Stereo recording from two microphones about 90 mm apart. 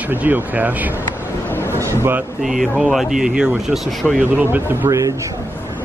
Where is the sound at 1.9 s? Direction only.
25° right (ahead or behind).